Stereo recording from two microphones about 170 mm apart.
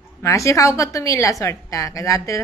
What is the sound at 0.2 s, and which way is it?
A woman's voice, 20° left (ahead or behind).